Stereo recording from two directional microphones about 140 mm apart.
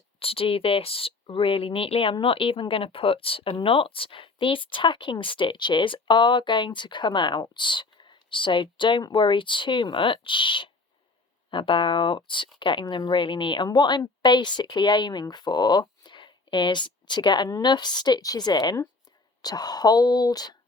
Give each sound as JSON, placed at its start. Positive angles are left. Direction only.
{"t": 0.2, "sound": "speech", "side_deg": 40}